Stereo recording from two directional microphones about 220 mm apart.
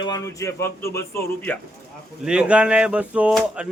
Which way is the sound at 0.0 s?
15° left (ahead or behind).